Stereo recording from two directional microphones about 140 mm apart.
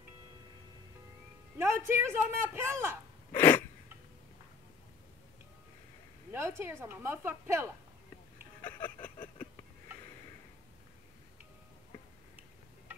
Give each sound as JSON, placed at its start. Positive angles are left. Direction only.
{"t": 1.6, "sound": "a man's voice", "side_deg": -15}
{"t": 3.3, "sound": "sneeze", "side_deg": 15}
{"t": 6.3, "sound": "a man's voice", "side_deg": -20}